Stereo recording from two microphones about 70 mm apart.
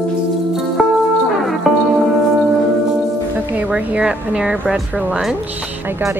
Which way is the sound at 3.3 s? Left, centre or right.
Right.